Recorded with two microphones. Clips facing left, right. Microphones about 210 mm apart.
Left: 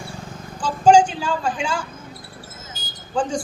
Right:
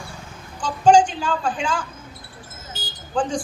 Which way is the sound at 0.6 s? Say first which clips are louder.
Left 1 dB; 10° left (ahead or behind).